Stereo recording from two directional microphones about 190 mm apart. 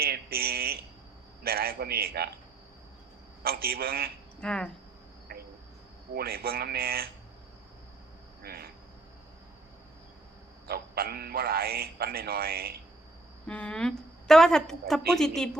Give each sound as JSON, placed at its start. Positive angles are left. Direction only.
{"t": 0.0, "sound": "a sound", "side_deg": -55}
{"t": 1.5, "sound": "speech", "side_deg": -55}
{"t": 3.4, "sound": "speech", "side_deg": -55}
{"t": 4.4, "sound": "speech", "side_deg": 5}
{"t": 5.3, "sound": "cricket", "side_deg": -55}
{"t": 6.1, "sound": "speech", "side_deg": -55}
{"t": 8.4, "sound": "speech", "side_deg": -55}
{"t": 10.7, "sound": "speech", "side_deg": -55}
{"t": 13.5, "sound": "a woman's voice", "side_deg": 5}